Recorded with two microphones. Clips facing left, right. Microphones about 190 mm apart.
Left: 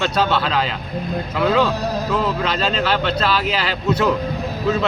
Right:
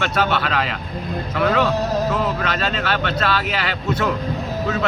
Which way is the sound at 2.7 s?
30° left (ahead or behind).